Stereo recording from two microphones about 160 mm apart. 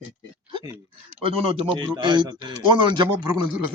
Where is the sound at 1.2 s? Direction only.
35° right (ahead or behind).